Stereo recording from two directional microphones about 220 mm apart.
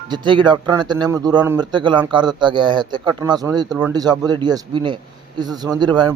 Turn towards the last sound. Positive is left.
turn(degrees=-20)  # may be behind; listen again after turning